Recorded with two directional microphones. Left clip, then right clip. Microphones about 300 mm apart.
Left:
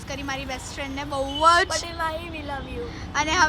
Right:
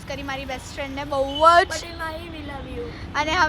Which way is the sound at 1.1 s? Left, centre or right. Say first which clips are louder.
Right 3 dB; centre.